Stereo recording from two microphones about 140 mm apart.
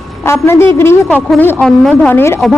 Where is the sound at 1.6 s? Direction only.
5° left (ahead or behind).